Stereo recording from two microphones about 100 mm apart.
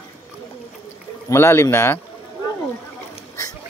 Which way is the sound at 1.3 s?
25° left (ahead or behind).